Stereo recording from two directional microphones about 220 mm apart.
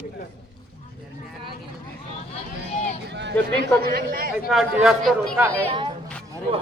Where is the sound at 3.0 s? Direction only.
50° right (ahead or behind).